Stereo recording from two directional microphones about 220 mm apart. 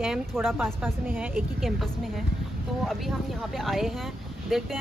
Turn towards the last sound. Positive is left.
turn(degrees=0)  # may be behind; listen again after turning